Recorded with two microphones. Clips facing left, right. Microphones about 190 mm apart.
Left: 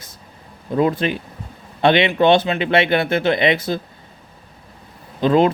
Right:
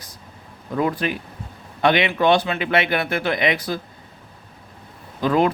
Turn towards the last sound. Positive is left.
turn(degrees=25)  # may be behind; listen again after turning